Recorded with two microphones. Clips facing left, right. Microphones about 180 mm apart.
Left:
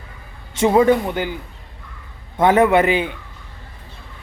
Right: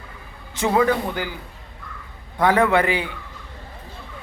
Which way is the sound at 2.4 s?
20° left (ahead or behind).